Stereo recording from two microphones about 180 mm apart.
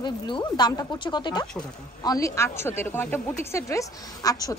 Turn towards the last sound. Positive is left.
turn(degrees=20)  # may be behind; listen again after turning